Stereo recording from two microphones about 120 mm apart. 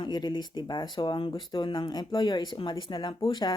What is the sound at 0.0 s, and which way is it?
Speech, 35° left (ahead or behind).